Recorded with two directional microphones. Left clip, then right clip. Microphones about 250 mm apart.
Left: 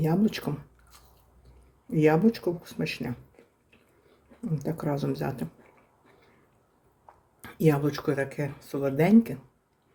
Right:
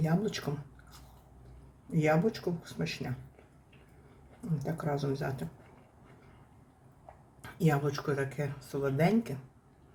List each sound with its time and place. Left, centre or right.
0.0 s speech: left
2.0 s speech: left
4.6 s speech: left
7.4 s speech: left